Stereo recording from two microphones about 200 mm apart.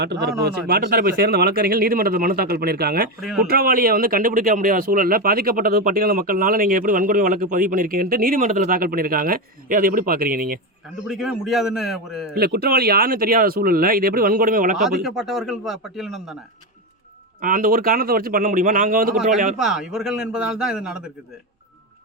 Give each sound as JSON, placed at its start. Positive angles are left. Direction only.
{"t": 0.0, "sound": "speech", "side_deg": -55}
{"t": 3.2, "sound": "speech", "side_deg": 0}
{"t": 3.5, "sound": "speech", "side_deg": -50}
{"t": 11.1, "sound": "speech", "side_deg": 0}
{"t": 12.3, "sound": "speech", "side_deg": -50}
{"t": 14.8, "sound": "speech", "side_deg": 0}
{"t": 17.4, "sound": "speech", "side_deg": -45}
{"t": 19.5, "sound": "speech", "side_deg": -5}